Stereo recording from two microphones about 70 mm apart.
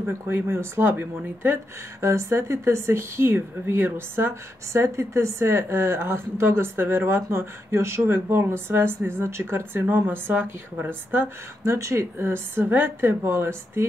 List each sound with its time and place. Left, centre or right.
0.0 s speech: right